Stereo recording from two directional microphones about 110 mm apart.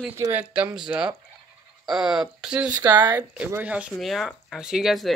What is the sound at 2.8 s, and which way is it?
Speech, 35° right (ahead or behind).